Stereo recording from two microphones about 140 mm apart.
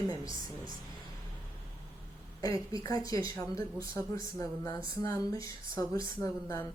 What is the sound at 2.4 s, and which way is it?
Speech, 25° left (ahead or behind).